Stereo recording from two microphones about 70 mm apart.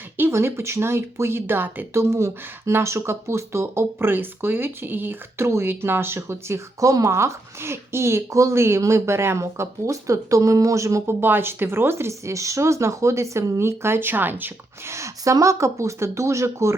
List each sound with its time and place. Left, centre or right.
0.3 s speech: right
1.9 s speech: right
11.2 s speech: right
14.8 s speech: right